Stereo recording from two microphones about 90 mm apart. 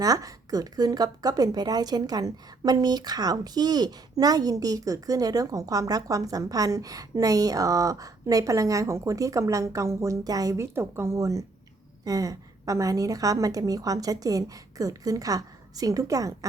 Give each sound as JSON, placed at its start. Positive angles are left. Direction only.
{"t": 0.0, "sound": "speech", "side_deg": -40}